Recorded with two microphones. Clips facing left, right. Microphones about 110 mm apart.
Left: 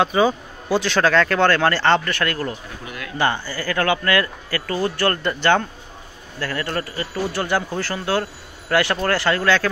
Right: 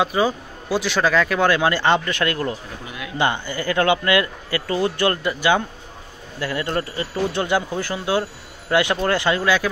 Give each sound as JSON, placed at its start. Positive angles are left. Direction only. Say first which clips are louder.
{"t": 0.0, "sound": "speech", "louder": "left 2 dB", "side_deg": -5}